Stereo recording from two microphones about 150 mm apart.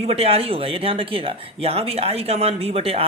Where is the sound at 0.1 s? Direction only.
40° right (ahead or behind).